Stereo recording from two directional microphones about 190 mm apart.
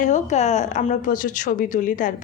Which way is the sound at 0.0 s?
40° left (ahead or behind).